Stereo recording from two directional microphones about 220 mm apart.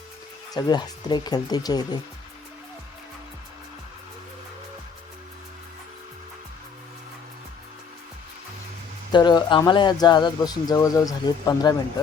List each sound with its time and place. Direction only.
0.5 s speech: 20° left (ahead or behind)
9.1 s speech: 20° left (ahead or behind)